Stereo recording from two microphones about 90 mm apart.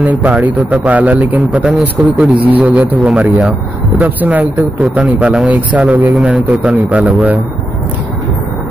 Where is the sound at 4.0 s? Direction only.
15° right (ahead or behind).